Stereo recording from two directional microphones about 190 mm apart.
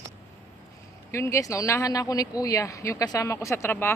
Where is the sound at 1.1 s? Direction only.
15° left (ahead or behind).